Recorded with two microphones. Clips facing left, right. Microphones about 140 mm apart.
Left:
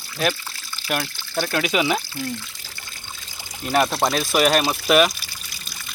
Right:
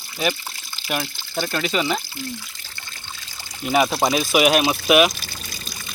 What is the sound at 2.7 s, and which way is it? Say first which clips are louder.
Trickle: right 2 dB; 10° left (ahead or behind).